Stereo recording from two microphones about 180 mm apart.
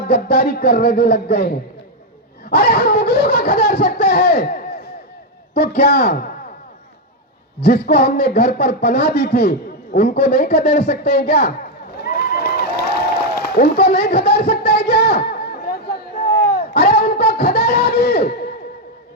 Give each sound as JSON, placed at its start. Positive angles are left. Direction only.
{"t": 0.1, "sound": "speech", "side_deg": 60}
{"t": 7.6, "sound": "speech", "side_deg": 60}
{"t": 12.0, "sound": "run", "side_deg": 60}
{"t": 13.6, "sound": "a sound", "side_deg": 60}